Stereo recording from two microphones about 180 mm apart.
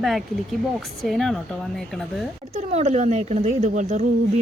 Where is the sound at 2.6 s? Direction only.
35° right (ahead or behind).